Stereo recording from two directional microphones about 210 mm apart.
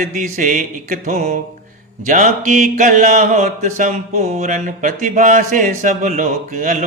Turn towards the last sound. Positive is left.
turn(degrees=-35)  # may be behind; listen again after turning